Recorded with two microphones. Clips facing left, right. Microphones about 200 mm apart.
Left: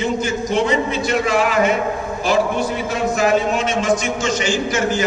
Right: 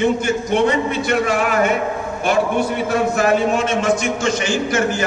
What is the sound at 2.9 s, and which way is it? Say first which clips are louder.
A man's voice: even; 55° right (ahead or behind).